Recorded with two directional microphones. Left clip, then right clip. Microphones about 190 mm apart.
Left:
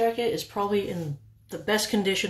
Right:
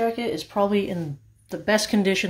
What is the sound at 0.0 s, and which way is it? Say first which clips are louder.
Speech: even; 40° right (ahead or behind).